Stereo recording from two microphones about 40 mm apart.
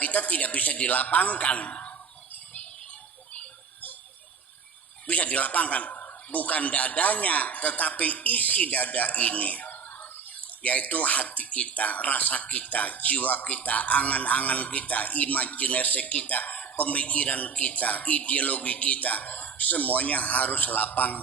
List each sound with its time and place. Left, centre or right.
0.0 s speech: left
5.0 s speech: left